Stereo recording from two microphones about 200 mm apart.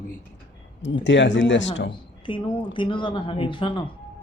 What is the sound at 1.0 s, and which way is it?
Speech, 65° left (ahead or behind).